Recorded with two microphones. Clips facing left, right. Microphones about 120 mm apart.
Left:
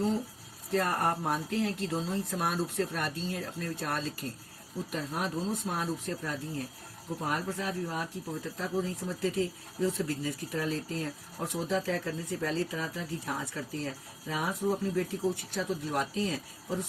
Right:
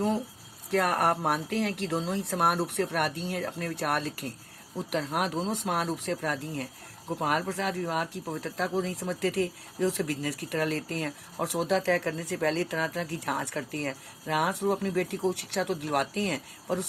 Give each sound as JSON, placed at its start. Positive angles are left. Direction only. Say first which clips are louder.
{"t": 0.7, "sound": "speech", "louder": "right 3 dB", "side_deg": -70}